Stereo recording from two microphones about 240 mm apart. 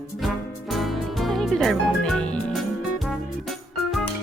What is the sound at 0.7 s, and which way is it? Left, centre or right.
Music, centre.